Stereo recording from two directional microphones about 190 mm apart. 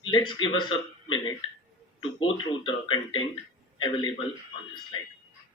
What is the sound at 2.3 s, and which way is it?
Speech, 25° left (ahead or behind).